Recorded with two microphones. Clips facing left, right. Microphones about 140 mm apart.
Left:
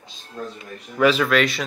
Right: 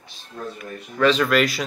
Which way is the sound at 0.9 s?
5° left (ahead or behind).